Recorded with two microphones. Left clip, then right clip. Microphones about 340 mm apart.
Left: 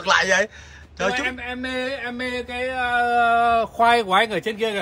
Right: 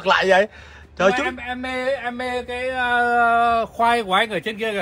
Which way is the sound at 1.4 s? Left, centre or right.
Centre.